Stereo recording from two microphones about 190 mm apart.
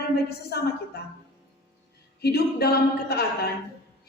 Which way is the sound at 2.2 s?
55° left (ahead or behind).